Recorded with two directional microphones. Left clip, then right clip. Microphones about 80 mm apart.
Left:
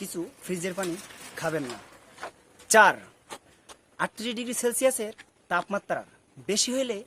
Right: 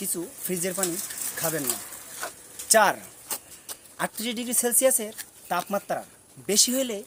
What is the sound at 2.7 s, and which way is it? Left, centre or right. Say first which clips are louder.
Speech: left 2 dB; centre.